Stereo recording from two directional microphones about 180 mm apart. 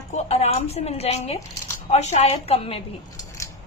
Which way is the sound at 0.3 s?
35° left (ahead or behind).